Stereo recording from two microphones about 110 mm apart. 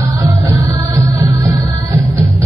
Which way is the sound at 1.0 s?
25° right (ahead or behind).